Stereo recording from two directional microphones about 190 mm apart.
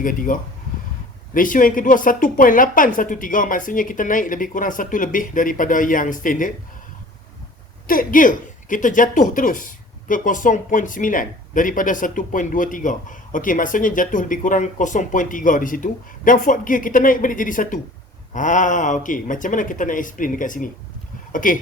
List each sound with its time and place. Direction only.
0.0 s a woman's voice: 45° left (ahead or behind)
7.9 s a woman's voice: 45° left (ahead or behind)